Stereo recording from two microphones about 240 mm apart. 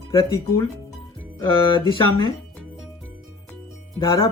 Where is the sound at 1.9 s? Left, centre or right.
Centre.